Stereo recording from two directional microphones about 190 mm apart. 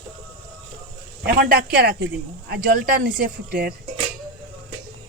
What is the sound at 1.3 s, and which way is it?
Speech, 55° right (ahead or behind).